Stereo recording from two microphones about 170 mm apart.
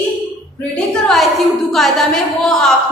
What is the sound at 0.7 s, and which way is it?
A woman's voice, centre (ahead or behind).